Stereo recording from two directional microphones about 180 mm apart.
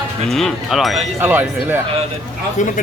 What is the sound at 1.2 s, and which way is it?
Speech, 10° right (ahead or behind).